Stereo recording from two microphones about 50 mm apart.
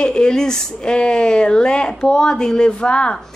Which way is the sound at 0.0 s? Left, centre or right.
Centre.